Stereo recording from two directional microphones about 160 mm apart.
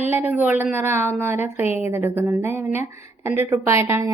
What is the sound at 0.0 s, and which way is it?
A woman's voice, 15° right (ahead or behind).